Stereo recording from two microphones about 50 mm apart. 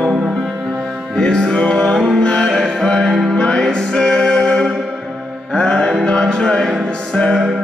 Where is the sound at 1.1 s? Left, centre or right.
Centre.